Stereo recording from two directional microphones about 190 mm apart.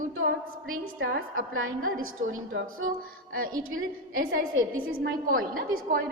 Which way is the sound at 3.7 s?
50° right (ahead or behind).